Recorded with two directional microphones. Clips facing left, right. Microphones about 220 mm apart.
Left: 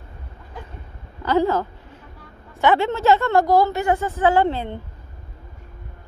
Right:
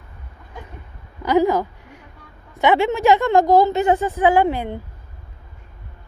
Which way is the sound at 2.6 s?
15° right (ahead or behind).